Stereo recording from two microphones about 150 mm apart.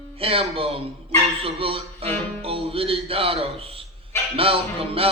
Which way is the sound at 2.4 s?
40° right (ahead or behind).